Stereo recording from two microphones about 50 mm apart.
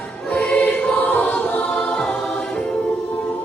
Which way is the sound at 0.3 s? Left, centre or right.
Left.